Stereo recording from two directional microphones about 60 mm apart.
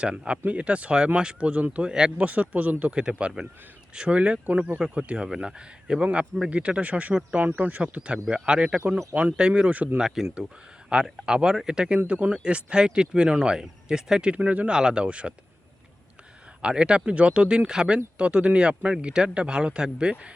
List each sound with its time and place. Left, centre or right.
0.0 s speech: centre
1.9 s speech: centre
2.1 s speech: right
2.9 s speech: centre
7.9 s speech: centre
9.6 s speech: right
10.0 s speech: centre
16.6 s speech: centre